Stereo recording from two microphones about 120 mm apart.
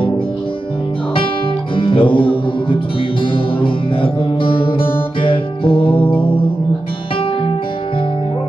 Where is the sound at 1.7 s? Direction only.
45° left (ahead or behind).